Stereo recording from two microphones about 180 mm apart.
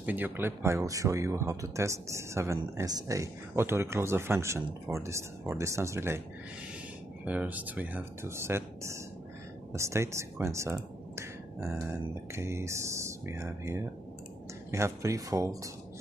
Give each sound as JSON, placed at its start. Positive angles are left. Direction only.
{"t": 0.0, "sound": "speech", "side_deg": -10}
{"t": 7.2, "sound": "speech", "side_deg": -10}